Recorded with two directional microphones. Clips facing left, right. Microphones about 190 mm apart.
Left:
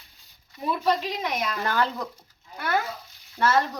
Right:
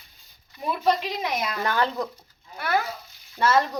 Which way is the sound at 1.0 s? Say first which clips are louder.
Right 1 dB; 10° right (ahead or behind).